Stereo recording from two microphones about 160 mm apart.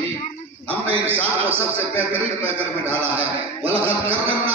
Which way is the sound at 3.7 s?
35° right (ahead or behind).